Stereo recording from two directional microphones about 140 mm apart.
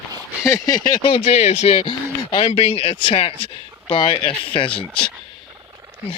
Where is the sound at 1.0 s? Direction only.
45° left (ahead or behind).